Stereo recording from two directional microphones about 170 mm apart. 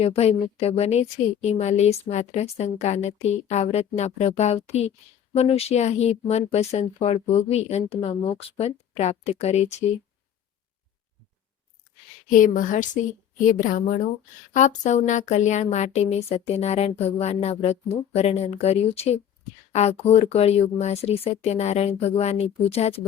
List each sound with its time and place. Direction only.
0.0 s a woman's voice: 35° left (ahead or behind)
12.3 s a woman's voice: 50° left (ahead or behind)